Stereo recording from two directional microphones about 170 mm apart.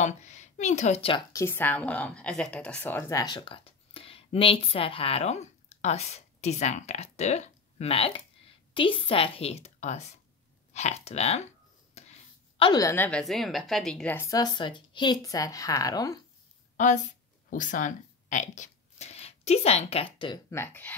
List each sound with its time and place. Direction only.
0.0 s speech: 45° left (ahead or behind)
1.3 s a woman's voice: 15° left (ahead or behind); by 11.4 s 40° left (ahead or behind)
12.0 s a sound: 40° left (ahead or behind)
12.5 s speech: 25° left (ahead or behind)
13.2 s speech: centre (ahead or behind); by 16.2 s 20° left (ahead or behind)
16.7 s speech: 45° left (ahead or behind)
20.4 s speech: 15° left (ahead or behind)